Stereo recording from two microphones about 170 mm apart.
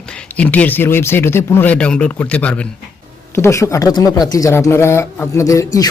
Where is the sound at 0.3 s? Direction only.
10° left (ahead or behind).